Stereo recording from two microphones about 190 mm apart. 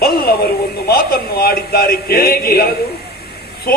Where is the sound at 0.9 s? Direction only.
55° left (ahead or behind).